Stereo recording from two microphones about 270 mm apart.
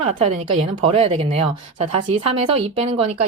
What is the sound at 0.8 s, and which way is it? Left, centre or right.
Speech, right.